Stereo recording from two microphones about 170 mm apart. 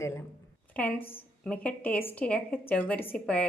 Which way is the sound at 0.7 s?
5° left (ahead or behind).